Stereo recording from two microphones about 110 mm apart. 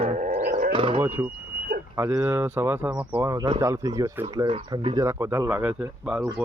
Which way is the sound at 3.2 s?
30° right (ahead or behind).